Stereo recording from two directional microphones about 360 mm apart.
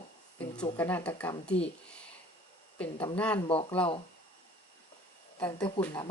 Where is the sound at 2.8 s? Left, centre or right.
Centre.